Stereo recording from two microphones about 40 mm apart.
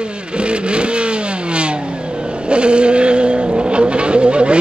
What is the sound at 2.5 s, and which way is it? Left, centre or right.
Vehicle, right.